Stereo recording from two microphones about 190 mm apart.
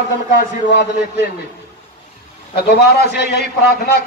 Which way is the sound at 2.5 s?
60° left (ahead or behind).